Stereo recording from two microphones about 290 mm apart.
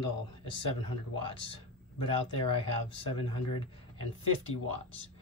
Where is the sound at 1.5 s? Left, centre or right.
Centre.